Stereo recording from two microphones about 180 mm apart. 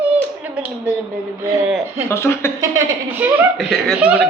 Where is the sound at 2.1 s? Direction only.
15° left (ahead or behind).